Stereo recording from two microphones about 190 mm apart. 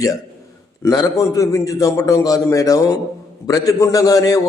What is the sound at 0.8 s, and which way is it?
A man's voice, 20° left (ahead or behind).